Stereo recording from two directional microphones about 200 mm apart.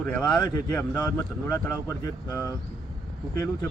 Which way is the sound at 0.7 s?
10° left (ahead or behind).